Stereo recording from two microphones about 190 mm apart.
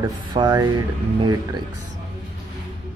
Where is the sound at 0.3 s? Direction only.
20° right (ahead or behind).